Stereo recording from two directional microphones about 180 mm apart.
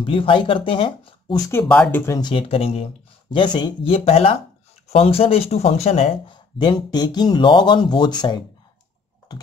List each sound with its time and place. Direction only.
0.0 s speech: 30° left (ahead or behind)
1.5 s speech: 10° left (ahead or behind)
2.1 s speech: 25° left (ahead or behind)